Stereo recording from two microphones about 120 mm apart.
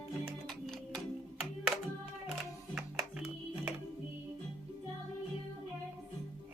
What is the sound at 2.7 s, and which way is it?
Music, 5° right (ahead or behind).